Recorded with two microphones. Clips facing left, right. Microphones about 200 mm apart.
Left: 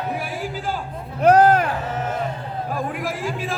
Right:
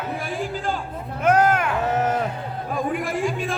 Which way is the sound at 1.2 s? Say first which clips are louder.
Left 4 dB; 35° left (ahead or behind).